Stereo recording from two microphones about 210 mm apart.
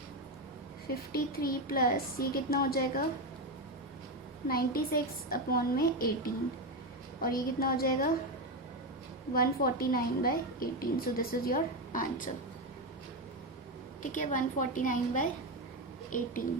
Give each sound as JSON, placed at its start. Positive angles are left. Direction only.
{"t": 1.1, "sound": "a woman's voice", "side_deg": 45}
{"t": 4.4, "sound": "a woman's voice", "side_deg": 45}
{"t": 7.2, "sound": "a woman's voice", "side_deg": 45}
{"t": 9.3, "sound": "a woman's voice", "side_deg": 45}
{"t": 14.0, "sound": "a woman's voice", "side_deg": 40}